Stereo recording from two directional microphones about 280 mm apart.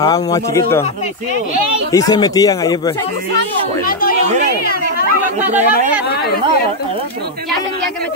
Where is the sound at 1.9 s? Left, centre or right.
Centre.